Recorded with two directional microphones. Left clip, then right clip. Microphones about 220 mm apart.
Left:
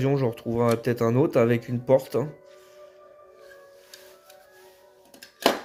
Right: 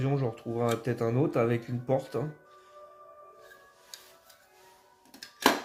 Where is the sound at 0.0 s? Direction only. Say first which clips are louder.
Left 7 dB; 40° left (ahead or behind).